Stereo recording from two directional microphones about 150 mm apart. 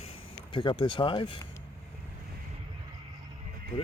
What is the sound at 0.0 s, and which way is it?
Speech, 35° left (ahead or behind).